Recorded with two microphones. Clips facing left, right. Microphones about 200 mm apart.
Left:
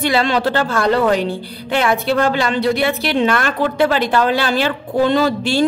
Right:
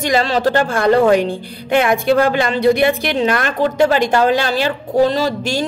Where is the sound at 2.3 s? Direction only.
50° right (ahead or behind).